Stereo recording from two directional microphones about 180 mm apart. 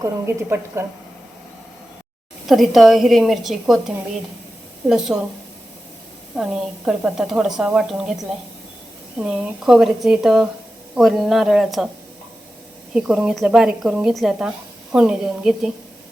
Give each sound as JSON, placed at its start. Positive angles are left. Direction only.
{"t": 0.0, "sound": "a woman's voice", "side_deg": -15}
{"t": 2.5, "sound": "speech", "side_deg": 0}
{"t": 6.3, "sound": "speech", "side_deg": -5}
{"t": 12.9, "sound": "speech", "side_deg": -5}